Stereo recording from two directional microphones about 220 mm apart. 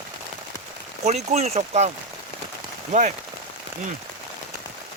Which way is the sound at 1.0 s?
30° right (ahead or behind).